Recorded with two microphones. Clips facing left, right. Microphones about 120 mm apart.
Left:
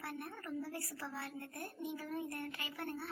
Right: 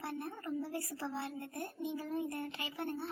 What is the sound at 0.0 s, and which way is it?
A woman's voice, 25° right (ahead or behind).